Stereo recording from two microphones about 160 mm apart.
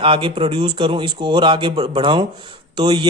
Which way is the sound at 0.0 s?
30° right (ahead or behind).